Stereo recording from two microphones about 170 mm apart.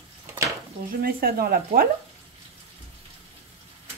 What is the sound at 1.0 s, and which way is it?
Speech, 60° right (ahead or behind).